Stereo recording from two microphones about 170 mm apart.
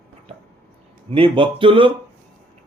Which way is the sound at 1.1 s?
30° right (ahead or behind).